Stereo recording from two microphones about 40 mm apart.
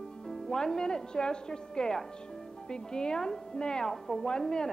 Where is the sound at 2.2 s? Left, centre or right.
Centre.